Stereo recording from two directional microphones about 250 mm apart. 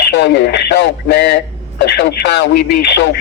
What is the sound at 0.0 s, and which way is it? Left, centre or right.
Speech, left.